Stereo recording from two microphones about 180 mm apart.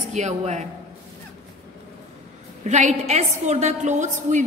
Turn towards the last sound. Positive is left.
turn(degrees=-45)  # may be behind; listen again after turning